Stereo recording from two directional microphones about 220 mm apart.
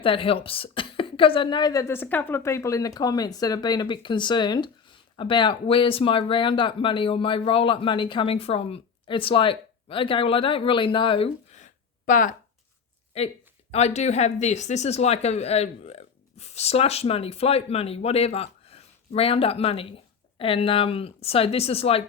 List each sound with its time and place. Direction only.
0.0 s a woman's voice: 25° left (ahead or behind)